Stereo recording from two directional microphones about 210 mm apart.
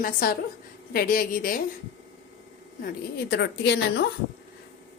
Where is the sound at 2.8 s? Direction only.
50° left (ahead or behind).